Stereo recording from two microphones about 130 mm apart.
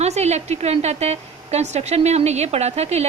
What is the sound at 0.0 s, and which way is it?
A woman's voice, 60° right (ahead or behind).